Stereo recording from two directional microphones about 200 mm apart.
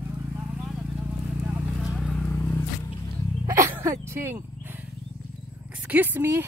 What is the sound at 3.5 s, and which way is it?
Roaring cats, 15° right (ahead or behind).